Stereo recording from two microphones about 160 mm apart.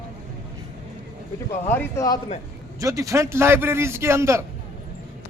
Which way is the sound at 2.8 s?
20° right (ahead or behind).